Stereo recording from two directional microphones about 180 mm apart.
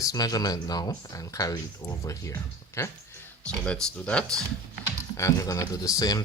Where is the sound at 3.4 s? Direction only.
5° left (ahead or behind).